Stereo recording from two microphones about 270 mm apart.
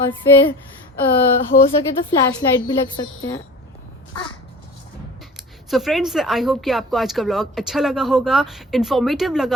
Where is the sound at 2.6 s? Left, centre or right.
Centre.